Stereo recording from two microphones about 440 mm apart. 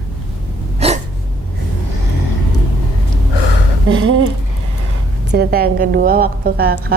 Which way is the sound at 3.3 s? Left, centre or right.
Left.